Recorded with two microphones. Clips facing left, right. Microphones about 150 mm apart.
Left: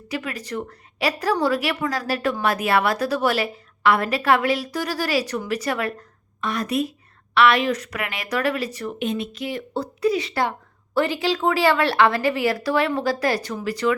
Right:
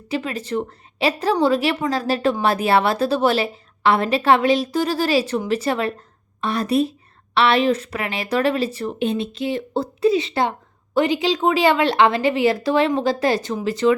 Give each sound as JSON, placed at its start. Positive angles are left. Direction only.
{"t": 0.1, "sound": "a woman's voice", "side_deg": -25}